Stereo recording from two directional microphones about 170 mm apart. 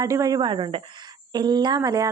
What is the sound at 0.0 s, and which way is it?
A woman's voice, 20° right (ahead or behind).